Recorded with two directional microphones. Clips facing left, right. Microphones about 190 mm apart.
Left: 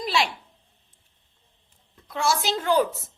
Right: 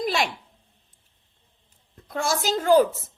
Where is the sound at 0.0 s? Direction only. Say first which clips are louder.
Right 1 dB; 50° right (ahead or behind).